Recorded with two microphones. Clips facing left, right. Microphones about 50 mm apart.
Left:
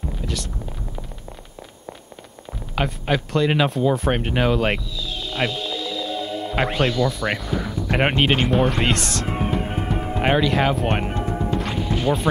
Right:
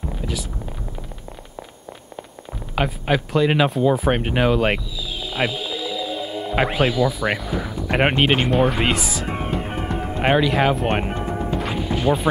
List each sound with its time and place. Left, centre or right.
0.2 s a sound: centre
2.7 s speech: centre
11.5 s music: centre